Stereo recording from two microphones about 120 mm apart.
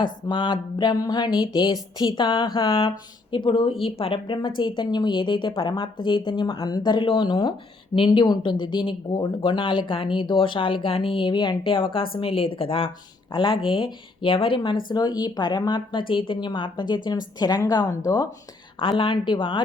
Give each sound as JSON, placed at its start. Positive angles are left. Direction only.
{"t": 0.0, "sound": "speech", "side_deg": 40}